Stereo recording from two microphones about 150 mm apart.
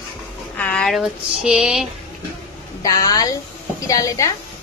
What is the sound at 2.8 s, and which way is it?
Speech, 25° left (ahead or behind).